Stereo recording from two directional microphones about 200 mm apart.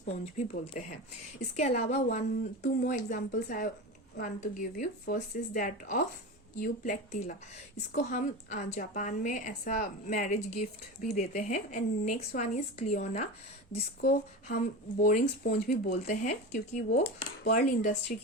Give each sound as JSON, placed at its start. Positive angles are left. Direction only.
{"t": 0.0, "sound": "a woman's voice", "side_deg": 35}
{"t": 14.5, "sound": "speech", "side_deg": 40}
{"t": 16.3, "sound": "a woman's voice", "side_deg": 35}
{"t": 17.0, "sound": "cutlery", "side_deg": 50}
{"t": 17.6, "sound": "a woman's voice", "side_deg": 40}